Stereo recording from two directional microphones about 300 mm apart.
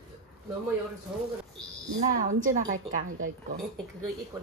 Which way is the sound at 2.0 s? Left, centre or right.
Right.